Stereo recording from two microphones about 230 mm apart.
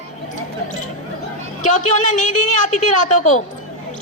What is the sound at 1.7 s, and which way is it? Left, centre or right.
A man's voice, left.